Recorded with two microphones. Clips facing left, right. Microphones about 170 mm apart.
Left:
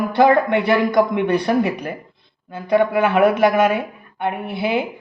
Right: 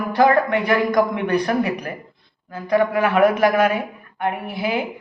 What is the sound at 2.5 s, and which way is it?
A man's voice, 25° left (ahead or behind).